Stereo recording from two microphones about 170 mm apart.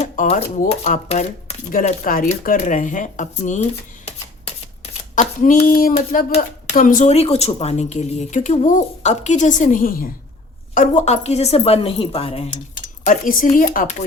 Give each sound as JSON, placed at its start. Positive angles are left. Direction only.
{"t": 0.0, "sound": "shuffling cards", "side_deg": 40}
{"t": 0.7, "sound": "speech", "side_deg": 40}
{"t": 10.8, "sound": "speech", "side_deg": 45}
{"t": 13.1, "sound": "speech", "side_deg": 55}